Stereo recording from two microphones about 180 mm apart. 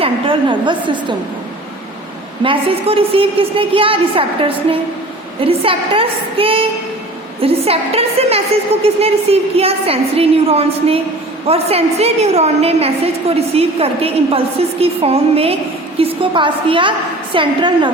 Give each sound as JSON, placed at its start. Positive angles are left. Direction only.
{"t": 0.0, "sound": "a woman's voice", "side_deg": -25}
{"t": 2.4, "sound": "a woman's voice", "side_deg": -30}
{"t": 5.4, "sound": "a woman's voice", "side_deg": -30}